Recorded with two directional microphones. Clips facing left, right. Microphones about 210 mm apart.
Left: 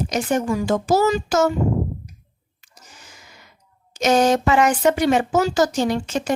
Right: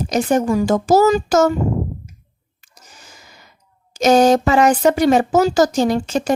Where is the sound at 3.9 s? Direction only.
40° right (ahead or behind).